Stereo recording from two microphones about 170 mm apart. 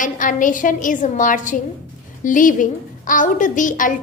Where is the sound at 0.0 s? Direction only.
50° left (ahead or behind).